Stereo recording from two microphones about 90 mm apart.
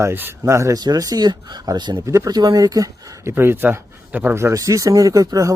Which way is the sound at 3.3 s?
25° right (ahead or behind).